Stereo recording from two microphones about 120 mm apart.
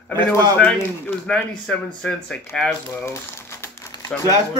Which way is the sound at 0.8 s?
15° left (ahead or behind).